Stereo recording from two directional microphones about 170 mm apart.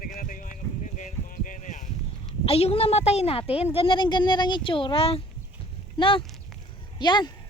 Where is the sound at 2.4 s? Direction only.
35° left (ahead or behind).